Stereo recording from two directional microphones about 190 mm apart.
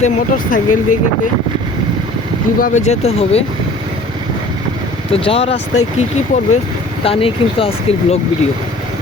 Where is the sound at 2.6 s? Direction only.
45° left (ahead or behind).